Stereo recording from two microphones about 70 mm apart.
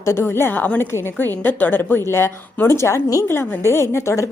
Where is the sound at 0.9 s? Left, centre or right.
Left.